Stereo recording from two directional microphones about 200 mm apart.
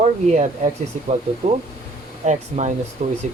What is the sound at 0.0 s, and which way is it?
Speech, 35° right (ahead or behind).